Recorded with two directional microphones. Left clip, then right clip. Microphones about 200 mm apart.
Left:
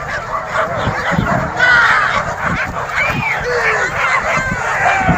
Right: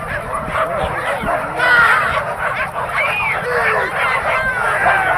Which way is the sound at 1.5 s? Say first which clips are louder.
Left 1 dB; 40° right (ahead or behind).